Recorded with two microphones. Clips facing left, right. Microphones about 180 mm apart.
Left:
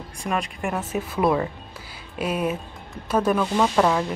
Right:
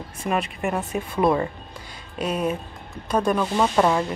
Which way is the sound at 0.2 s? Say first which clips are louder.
Right 2 dB; centre (ahead or behind).